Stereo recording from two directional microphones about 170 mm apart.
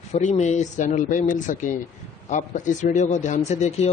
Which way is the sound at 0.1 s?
40° left (ahead or behind).